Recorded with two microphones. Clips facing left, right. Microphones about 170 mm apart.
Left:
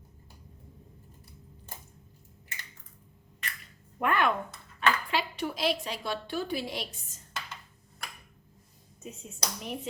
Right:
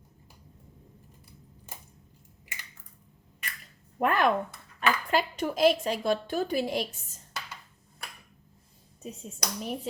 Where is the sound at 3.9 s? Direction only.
40° right (ahead or behind).